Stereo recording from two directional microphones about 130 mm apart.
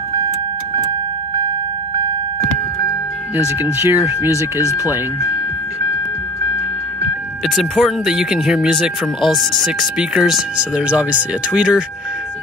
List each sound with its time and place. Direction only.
3.8 s speech: 20° right (ahead or behind)
7.4 s speech: centre (ahead or behind)